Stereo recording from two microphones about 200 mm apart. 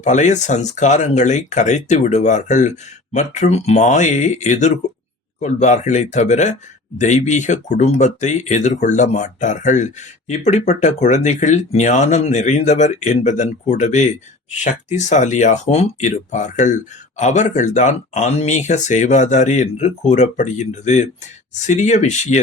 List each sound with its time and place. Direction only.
0.0 s speech: 35° left (ahead or behind)